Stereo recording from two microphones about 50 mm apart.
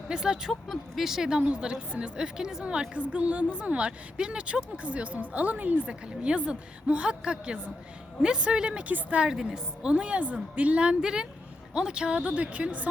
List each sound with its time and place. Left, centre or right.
0.1 s a woman's voice: centre
0.4 s a woman's voice: centre; by 8.9 s right
8.9 s a woman's voice: right
9.3 s a woman's voice: centre
9.9 s a woman's voice: right